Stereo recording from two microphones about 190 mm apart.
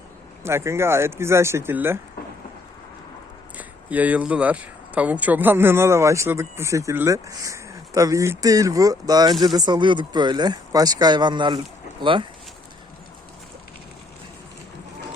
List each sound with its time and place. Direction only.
0.4 s speech: 15° right (ahead or behind)
3.6 s speech: 10° right (ahead or behind); by 12.3 s 25° right (ahead or behind)